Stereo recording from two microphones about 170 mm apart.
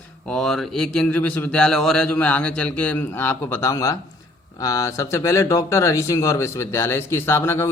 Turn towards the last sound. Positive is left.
turn(degrees=15)  # may be behind; listen again after turning